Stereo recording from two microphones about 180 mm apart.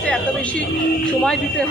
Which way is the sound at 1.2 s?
5° left (ahead or behind).